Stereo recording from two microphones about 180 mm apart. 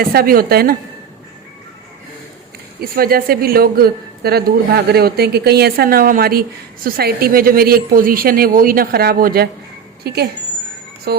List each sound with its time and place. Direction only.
0.0 s speech: 55° right (ahead or behind)
2.8 s a woman's voice: 55° right (ahead or behind)